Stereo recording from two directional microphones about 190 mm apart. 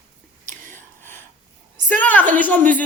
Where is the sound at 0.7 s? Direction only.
10° left (ahead or behind).